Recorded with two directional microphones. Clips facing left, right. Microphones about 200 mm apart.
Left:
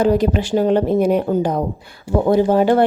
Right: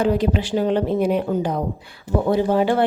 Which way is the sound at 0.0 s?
40° left (ahead or behind).